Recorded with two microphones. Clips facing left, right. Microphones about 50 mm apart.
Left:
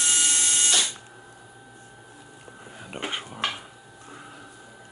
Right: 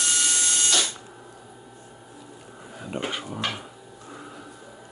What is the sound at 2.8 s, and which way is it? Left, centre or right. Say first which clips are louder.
Dog: right 4 dB; centre.